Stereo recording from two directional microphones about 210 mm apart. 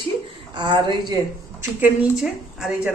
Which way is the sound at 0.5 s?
20° right (ahead or behind).